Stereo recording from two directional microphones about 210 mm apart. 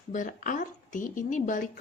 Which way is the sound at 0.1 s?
40° left (ahead or behind).